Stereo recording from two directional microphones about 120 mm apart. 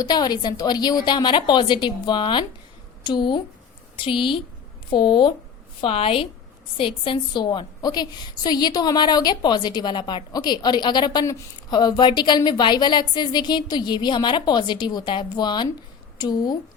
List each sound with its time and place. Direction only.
0.0 s a woman's voice: 35° left (ahead or behind)
5.8 s a woman's voice: 55° left (ahead or behind); by 16.6 s 35° left (ahead or behind)